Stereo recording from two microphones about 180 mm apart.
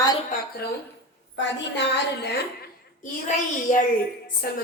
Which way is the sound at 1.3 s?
75° left (ahead or behind).